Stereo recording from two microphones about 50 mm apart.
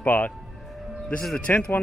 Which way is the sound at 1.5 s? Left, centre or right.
Left.